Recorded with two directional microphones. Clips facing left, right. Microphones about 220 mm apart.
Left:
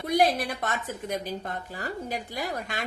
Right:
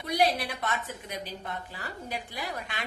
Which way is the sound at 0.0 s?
50° left (ahead or behind).